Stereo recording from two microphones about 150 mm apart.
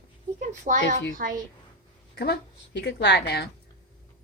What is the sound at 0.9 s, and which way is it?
Speech, 65° right (ahead or behind).